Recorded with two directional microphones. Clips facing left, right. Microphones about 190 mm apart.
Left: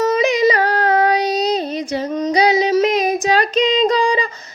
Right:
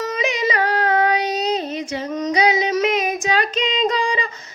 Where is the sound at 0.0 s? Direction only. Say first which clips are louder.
Left 8 dB; 40° left (ahead or behind).